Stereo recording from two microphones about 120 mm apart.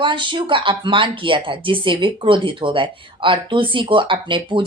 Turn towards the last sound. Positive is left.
turn(degrees=-45)  # may be behind; listen again after turning